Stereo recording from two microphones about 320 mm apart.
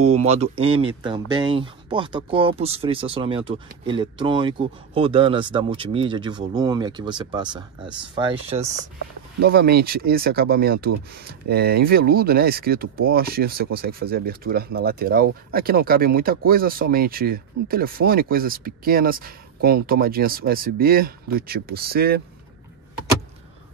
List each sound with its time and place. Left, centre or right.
0.0 s speech: centre
9.4 s speech: right